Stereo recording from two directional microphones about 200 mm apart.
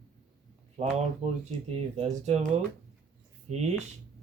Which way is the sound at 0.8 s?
35° right (ahead or behind).